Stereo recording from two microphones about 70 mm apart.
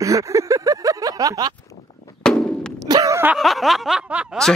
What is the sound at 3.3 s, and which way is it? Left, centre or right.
Speech, centre.